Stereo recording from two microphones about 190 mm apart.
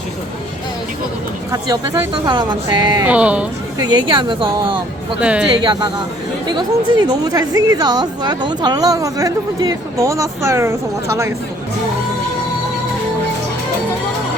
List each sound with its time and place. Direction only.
1.6 s a woman's voice: 20° right (ahead or behind)
3.1 s speech: 5° right (ahead or behind)
3.8 s a woman's voice: 20° right (ahead or behind)
5.2 s speech: 5° right (ahead or behind)
6.5 s a woman's voice: 25° right (ahead or behind)